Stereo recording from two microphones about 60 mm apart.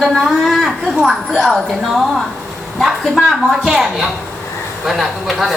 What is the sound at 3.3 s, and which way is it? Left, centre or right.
A woman's voice, centre.